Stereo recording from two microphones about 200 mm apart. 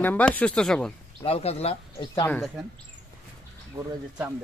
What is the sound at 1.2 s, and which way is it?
Speech, 30° left (ahead or behind).